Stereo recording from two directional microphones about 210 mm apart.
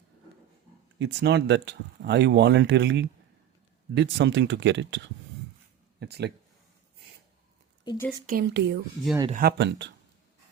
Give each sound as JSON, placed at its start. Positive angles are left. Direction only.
{"t": 0.9, "sound": "speech", "side_deg": -55}
{"t": 7.9, "sound": "speech", "side_deg": 10}
{"t": 8.3, "sound": "speech", "side_deg": -50}